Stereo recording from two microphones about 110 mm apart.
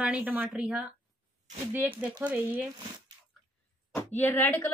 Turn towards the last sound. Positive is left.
turn(degrees=20)  # may be behind; listen again after turning